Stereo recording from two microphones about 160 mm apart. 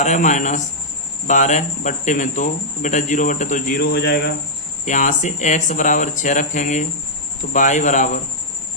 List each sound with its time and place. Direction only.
0.0 s speech: 50° left (ahead or behind)
3.8 s a man's voice: 80° left
4.9 s speech: 50° left (ahead or behind)